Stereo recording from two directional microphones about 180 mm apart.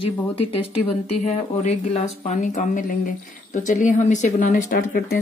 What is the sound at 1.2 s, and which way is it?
Speech, 40° left (ahead or behind).